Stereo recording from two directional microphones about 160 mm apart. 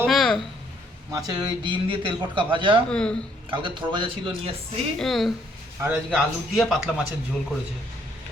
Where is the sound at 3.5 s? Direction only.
30° right (ahead or behind).